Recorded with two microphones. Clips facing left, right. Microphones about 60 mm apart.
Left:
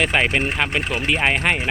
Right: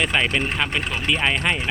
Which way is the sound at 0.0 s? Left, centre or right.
Left.